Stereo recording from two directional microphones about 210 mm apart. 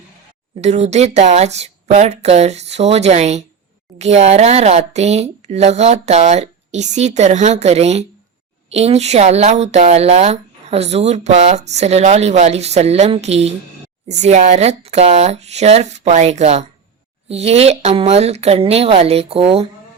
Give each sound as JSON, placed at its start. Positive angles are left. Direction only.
{"t": 0.6, "sound": "speech", "side_deg": -30}